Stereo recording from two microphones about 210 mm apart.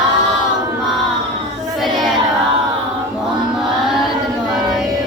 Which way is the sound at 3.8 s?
Centre (ahead or behind).